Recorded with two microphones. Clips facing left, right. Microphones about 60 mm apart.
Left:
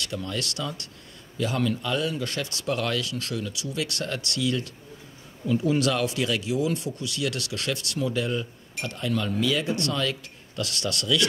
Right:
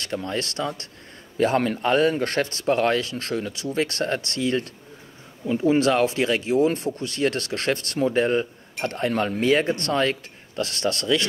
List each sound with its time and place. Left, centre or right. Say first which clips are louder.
0.0 s speech: right 4 dB; right